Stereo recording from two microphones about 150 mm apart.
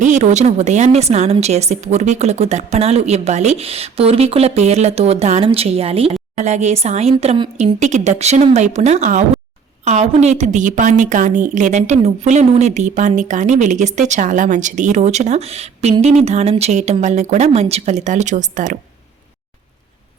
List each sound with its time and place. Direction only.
0.0 s a woman's voice: 50° right (ahead or behind)